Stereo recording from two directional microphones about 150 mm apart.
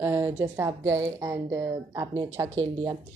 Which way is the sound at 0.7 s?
25° right (ahead or behind).